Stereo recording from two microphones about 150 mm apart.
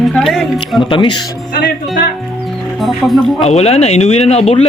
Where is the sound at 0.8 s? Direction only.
35° left (ahead or behind).